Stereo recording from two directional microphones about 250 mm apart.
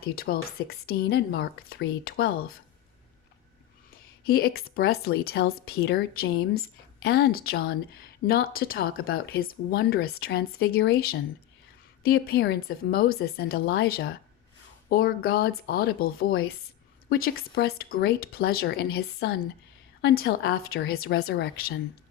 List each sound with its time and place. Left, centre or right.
0.0 s speech: left
4.2 s speech: left